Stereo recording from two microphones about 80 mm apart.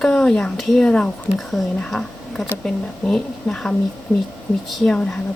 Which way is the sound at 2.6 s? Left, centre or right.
Centre.